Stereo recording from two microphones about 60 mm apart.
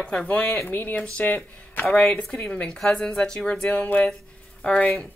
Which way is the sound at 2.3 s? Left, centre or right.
Centre.